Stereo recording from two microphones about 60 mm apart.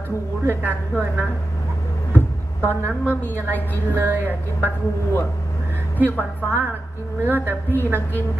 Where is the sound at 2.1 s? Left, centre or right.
Left.